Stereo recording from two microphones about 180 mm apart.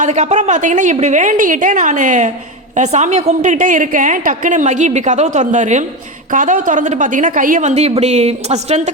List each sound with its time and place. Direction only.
0.0 s a woman's voice: 40° right (ahead or behind)